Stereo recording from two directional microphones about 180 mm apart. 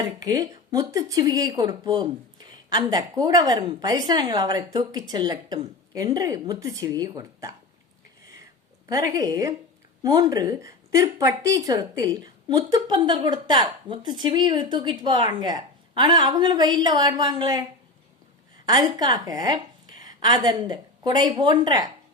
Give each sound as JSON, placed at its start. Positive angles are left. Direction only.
{"t": 0.0, "sound": "a woman's voice", "side_deg": -20}
{"t": 8.9, "sound": "a woman's voice", "side_deg": -20}